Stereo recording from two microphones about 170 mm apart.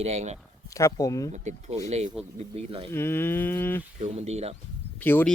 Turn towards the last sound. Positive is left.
turn(degrees=10)  # may be behind; listen again after turning